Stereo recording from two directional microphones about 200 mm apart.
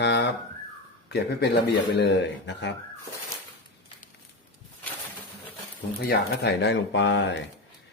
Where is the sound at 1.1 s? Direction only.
55° left (ahead or behind).